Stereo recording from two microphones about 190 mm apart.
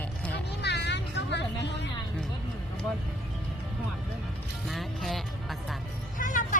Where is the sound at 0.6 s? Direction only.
65° left (ahead or behind).